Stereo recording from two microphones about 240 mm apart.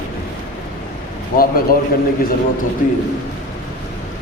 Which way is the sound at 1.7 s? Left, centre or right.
Left.